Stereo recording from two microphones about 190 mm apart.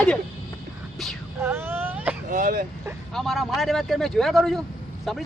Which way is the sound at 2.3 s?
45° right (ahead or behind).